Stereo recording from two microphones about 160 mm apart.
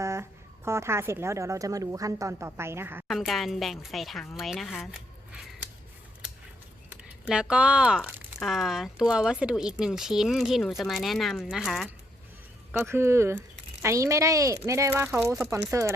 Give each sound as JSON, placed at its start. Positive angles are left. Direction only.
{"t": 0.0, "sound": "speech", "side_deg": -15}
{"t": 3.1, "sound": "speech", "side_deg": 0}
{"t": 4.9, "sound": "a sound", "side_deg": -5}
{"t": 7.3, "sound": "speech", "side_deg": -5}
{"t": 12.8, "sound": "speech", "side_deg": -15}